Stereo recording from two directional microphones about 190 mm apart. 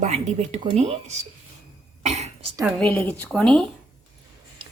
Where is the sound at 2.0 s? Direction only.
35° right (ahead or behind).